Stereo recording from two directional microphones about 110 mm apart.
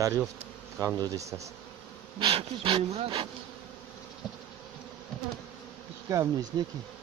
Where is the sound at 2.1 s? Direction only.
55° right (ahead or behind).